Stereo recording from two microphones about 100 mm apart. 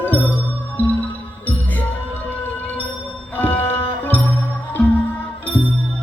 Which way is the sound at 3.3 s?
15° left (ahead or behind).